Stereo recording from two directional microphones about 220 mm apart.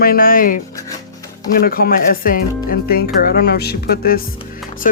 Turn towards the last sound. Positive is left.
turn(degrees=45)  # may be behind; listen again after turning